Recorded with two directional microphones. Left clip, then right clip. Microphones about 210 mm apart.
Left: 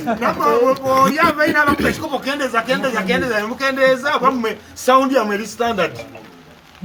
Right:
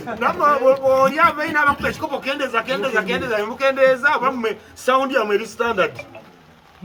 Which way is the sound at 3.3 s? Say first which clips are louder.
Even; 20° right (ahead or behind).